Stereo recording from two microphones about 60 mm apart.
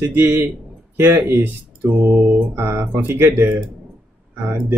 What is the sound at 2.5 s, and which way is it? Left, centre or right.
Speech, right.